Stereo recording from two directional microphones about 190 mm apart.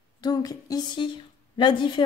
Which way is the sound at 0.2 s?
20° left (ahead or behind).